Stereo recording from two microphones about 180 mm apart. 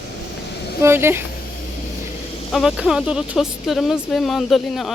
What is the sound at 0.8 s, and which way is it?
Speech, 15° right (ahead or behind).